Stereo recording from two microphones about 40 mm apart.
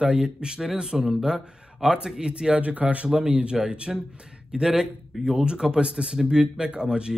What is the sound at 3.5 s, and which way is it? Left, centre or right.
Speech, right.